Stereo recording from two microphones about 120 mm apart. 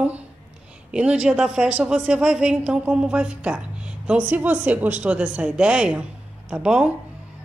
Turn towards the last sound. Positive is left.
turn(degrees=-10)  # may be behind; listen again after turning